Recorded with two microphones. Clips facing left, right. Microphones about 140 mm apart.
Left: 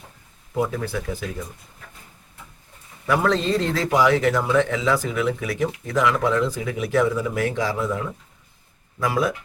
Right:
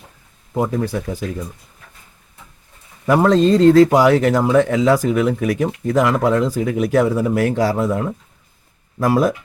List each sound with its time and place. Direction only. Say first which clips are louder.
0.5 s speech: right 5 dB; 40° right (ahead or behind)
3.1 s speech: right 7 dB; 45° right (ahead or behind)